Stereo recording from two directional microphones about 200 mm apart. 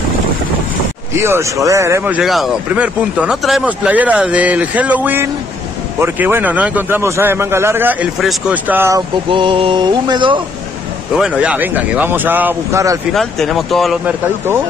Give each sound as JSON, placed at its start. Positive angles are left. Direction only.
{"t": 1.1, "sound": "speech", "side_deg": -15}
{"t": 9.3, "sound": "a sound", "side_deg": -25}
{"t": 11.1, "sound": "speech", "side_deg": -5}
{"t": 13.1, "sound": "speech", "side_deg": 0}